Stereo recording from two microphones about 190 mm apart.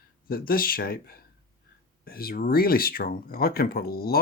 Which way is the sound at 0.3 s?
50° left (ahead or behind).